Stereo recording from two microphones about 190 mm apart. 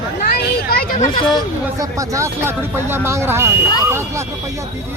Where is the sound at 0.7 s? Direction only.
45° left (ahead or behind).